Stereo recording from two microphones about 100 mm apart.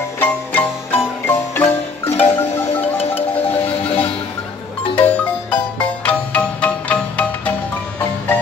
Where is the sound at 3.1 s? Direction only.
70° left (ahead or behind).